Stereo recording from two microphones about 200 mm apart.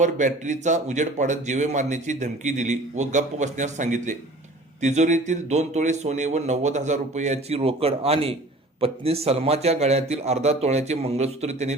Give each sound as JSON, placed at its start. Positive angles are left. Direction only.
{"t": 0.0, "sound": "a man's voice", "side_deg": -35}